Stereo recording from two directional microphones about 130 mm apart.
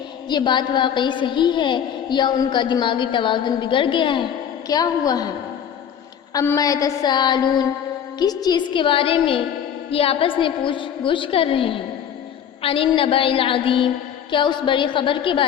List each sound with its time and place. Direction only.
0.3 s a woman's voice: 35° left (ahead or behind)
6.6 s a woman's voice: 25° left (ahead or behind)